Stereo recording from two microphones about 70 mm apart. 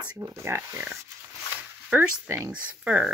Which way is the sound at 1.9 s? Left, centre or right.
Right.